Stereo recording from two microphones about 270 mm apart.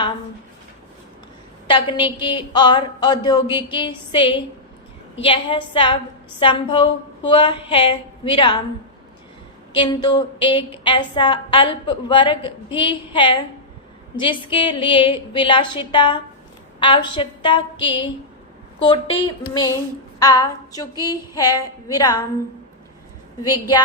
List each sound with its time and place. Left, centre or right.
1.6 s a woman's voice: centre
9.7 s a woman's voice: centre
23.4 s a woman's voice: centre